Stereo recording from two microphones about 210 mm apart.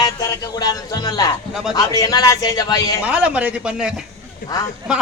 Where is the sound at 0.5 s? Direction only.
15° left (ahead or behind).